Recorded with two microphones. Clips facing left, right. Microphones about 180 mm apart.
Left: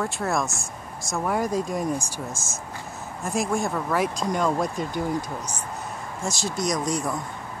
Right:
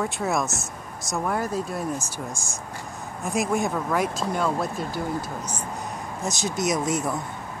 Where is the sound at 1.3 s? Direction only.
15° left (ahead or behind).